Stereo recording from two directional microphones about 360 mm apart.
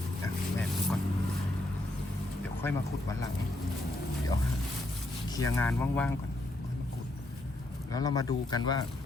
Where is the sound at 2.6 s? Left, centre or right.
Centre.